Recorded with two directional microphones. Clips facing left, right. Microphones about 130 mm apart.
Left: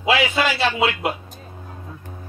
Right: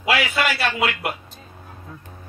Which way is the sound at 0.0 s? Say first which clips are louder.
Left 2 dB; 20° left (ahead or behind).